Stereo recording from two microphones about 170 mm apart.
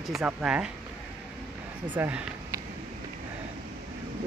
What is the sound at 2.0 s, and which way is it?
Speech, 15° right (ahead or behind).